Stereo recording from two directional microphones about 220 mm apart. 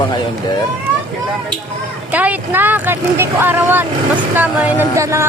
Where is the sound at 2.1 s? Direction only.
5° right (ahead or behind).